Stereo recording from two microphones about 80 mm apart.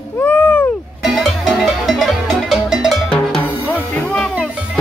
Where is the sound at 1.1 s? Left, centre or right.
Centre.